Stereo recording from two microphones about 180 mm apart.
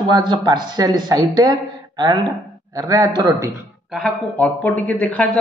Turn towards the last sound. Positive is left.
turn(degrees=5)  # may be behind; listen again after turning